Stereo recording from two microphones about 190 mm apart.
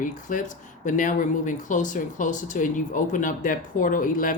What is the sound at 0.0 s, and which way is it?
Speech, 45° left (ahead or behind).